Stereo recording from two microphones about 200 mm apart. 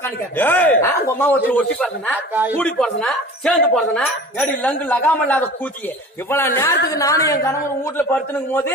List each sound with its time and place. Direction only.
0.0 s a man's voice: 10° left (ahead or behind)
2.1 s speech: 10° right (ahead or behind)
2.6 s speech: 5° left (ahead or behind)